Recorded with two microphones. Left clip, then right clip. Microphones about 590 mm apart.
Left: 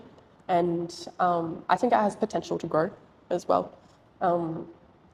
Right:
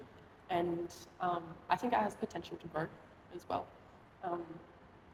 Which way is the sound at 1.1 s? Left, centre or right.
Left.